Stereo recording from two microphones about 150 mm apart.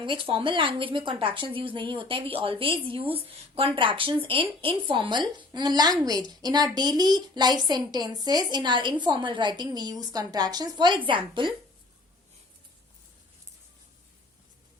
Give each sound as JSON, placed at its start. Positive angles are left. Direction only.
{"t": 0.0, "sound": "a woman's voice", "side_deg": -35}